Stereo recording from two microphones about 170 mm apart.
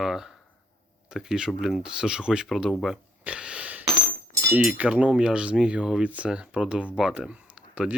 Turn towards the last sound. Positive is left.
turn(degrees=-5)  # may be behind; listen again after turning